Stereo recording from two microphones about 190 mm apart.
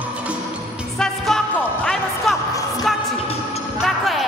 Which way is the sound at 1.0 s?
5° left (ahead or behind).